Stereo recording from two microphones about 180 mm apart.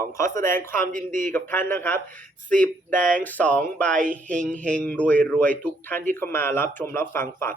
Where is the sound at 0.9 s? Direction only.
45° right (ahead or behind).